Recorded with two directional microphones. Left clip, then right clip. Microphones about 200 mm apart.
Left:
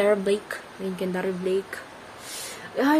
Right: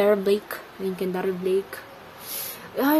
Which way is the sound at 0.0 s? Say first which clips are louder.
Right 1 dB; 20° right (ahead or behind).